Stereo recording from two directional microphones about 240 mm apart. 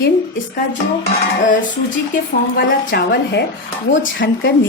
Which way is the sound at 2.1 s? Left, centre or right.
Left.